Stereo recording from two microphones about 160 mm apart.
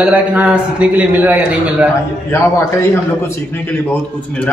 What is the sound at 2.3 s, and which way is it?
Speech, 15° left (ahead or behind).